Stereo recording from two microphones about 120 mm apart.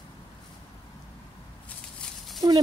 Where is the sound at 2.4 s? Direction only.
35° right (ahead or behind).